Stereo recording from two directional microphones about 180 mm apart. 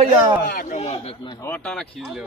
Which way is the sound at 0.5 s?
50° left (ahead or behind).